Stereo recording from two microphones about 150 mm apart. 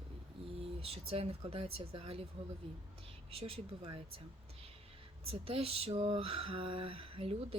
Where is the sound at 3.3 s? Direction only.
40° right (ahead or behind).